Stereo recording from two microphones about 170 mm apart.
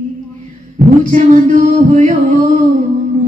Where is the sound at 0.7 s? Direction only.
50° right (ahead or behind).